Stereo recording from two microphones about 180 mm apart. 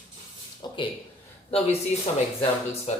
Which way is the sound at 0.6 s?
25° left (ahead or behind).